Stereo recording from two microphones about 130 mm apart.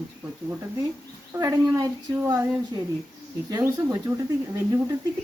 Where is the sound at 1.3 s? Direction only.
20° right (ahead or behind).